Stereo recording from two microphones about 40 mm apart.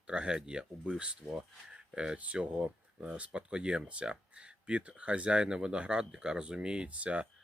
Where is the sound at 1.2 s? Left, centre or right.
Centre.